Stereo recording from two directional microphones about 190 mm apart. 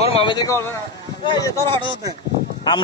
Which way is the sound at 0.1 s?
25° left (ahead or behind).